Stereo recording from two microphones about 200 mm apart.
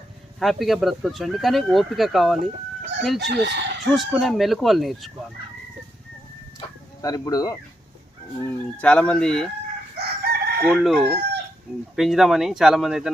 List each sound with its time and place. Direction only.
0.3 s speech: centre (ahead or behind)
2.4 s speech: 60° right (ahead or behind)
3.0 s speech: centre (ahead or behind)
3.3 s chicken: 60° right (ahead or behind)
3.9 s speech: centre (ahead or behind)
7.0 s speech: 20° left (ahead or behind)
8.4 s speech: 5° left (ahead or behind)
10.0 s chicken: 50° right (ahead or behind)
10.7 s speech: centre (ahead or behind)